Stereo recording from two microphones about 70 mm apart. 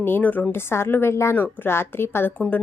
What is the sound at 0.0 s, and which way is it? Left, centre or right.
Speech, left.